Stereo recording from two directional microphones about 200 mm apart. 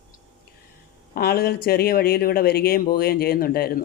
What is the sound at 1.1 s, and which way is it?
Speech, 50° left (ahead or behind).